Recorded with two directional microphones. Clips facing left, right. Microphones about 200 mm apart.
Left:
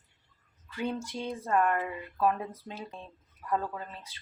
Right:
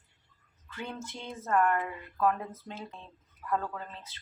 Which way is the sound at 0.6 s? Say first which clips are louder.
Left 6 dB; 15° left (ahead or behind).